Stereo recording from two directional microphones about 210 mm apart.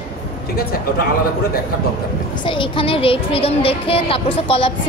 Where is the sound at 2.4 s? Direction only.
25° left (ahead or behind).